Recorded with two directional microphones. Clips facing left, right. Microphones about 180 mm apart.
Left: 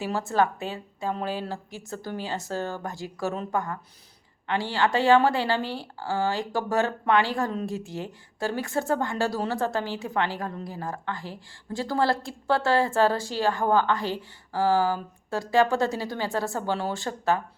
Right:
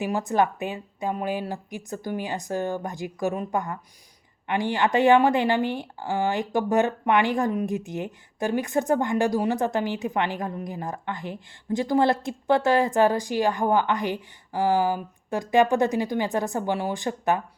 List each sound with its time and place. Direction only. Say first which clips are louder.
0.0 s a woman's voice: right 2 dB; 15° right (ahead or behind)